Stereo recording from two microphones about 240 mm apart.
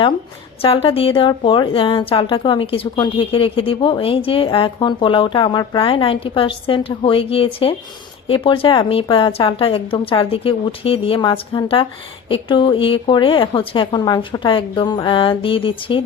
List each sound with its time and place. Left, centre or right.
0.6 s a woman's voice: left